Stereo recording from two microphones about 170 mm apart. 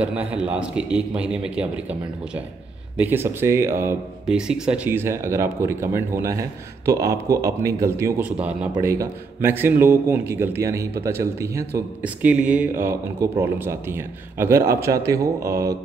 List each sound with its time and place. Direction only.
0.0 s speech: 5° right (ahead or behind)
8.7 s a man's voice: 20° right (ahead or behind)